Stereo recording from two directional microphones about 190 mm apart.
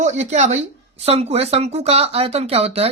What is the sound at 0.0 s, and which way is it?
Speech, 40° right (ahead or behind).